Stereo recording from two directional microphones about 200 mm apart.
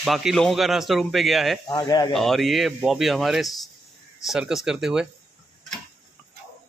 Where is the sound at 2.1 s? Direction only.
Centre (ahead or behind).